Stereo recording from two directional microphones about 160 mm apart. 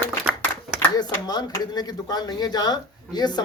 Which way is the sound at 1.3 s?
25° left (ahead or behind).